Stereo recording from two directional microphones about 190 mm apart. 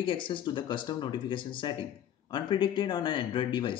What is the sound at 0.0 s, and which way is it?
Speech, 25° left (ahead or behind).